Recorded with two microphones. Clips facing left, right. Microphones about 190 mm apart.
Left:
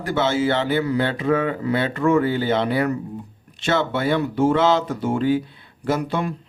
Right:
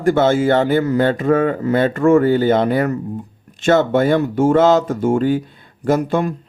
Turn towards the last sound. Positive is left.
turn(degrees=-45)  # may be behind; listen again after turning